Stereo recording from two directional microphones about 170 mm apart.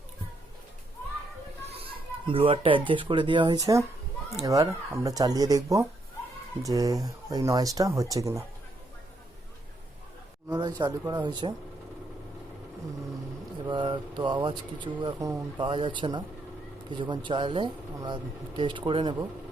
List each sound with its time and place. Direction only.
1.6 s speech: 35° right (ahead or behind); by 8.4 s 20° right (ahead or behind)
10.5 s speech: 25° right (ahead or behind)
13.7 s speech: 30° right (ahead or behind)